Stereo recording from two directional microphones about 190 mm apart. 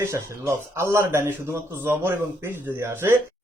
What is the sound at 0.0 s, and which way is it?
A man's voice, 15° right (ahead or behind).